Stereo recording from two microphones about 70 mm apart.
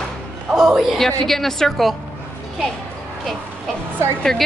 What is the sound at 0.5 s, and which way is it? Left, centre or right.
Speech, centre.